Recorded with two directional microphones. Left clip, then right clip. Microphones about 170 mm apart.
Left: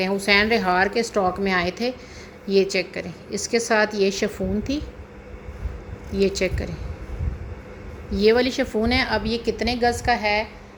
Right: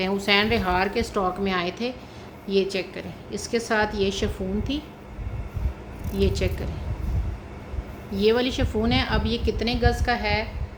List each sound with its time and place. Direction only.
0.0 s a woman's voice: 20° left (ahead or behind)
6.1 s a woman's voice: 30° left (ahead or behind)
8.1 s a woman's voice: 30° left (ahead or behind)